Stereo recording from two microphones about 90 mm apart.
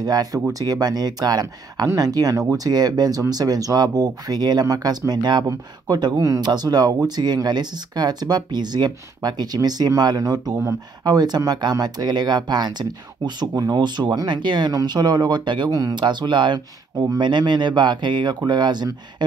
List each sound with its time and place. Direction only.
0.0 s speech: 45° right (ahead or behind)